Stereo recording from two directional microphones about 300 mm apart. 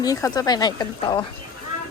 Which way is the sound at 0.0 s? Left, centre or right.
Centre.